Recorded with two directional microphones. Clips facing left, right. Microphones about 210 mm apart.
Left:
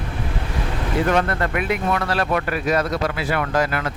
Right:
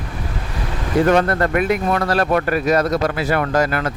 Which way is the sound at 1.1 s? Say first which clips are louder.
Right 5 dB; 40° right (ahead or behind).